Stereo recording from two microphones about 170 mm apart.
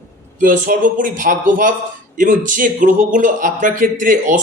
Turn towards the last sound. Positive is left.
turn(degrees=-50)  # may be behind; listen again after turning